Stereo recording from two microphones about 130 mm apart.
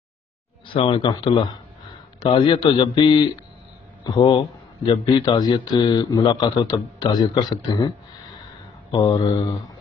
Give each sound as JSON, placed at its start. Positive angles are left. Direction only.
{"t": 0.7, "sound": "speech", "side_deg": 45}
{"t": 8.9, "sound": "mantra", "side_deg": 30}